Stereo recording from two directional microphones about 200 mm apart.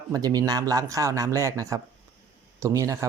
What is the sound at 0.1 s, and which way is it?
Speech, 20° right (ahead or behind).